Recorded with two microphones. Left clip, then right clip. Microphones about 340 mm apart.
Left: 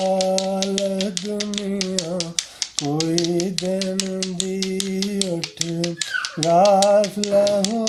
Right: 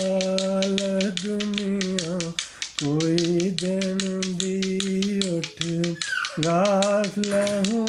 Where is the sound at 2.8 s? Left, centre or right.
Centre.